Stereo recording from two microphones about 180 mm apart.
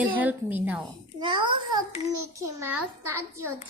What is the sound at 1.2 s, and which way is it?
Child singing, 25° right (ahead or behind).